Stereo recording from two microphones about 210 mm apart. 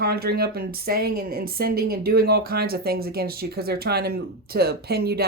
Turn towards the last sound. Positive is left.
turn(degrees=-50)  # may be behind; listen again after turning